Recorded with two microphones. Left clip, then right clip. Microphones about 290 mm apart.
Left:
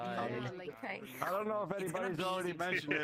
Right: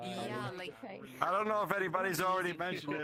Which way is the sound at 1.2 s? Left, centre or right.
Right.